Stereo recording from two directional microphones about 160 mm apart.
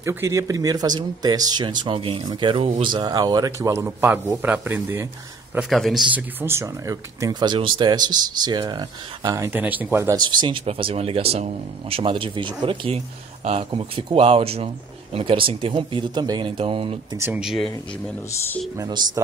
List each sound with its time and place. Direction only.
0.0 s speech: 15° right (ahead or behind)
5.5 s a man's voice: centre (ahead or behind)
6.4 s speech: 15° right (ahead or behind)
10.1 s speech: 25° right (ahead or behind)
17.2 s a man's voice: 5° right (ahead or behind)
18.8 s speech: 25° right (ahead or behind)